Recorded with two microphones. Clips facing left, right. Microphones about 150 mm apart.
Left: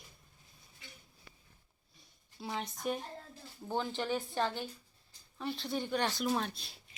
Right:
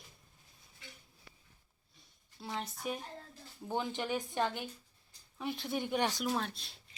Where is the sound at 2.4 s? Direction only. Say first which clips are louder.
Left 2 dB; centre (ahead or behind); by 6.2 s 15° right (ahead or behind).